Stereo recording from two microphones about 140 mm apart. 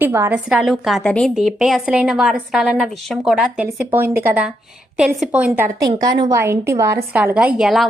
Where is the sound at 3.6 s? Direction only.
15° right (ahead or behind).